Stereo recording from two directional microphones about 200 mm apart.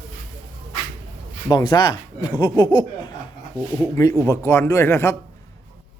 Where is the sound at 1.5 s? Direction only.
20° left (ahead or behind).